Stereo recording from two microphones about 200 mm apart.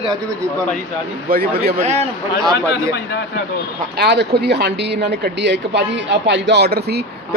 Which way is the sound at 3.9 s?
55° right (ahead or behind).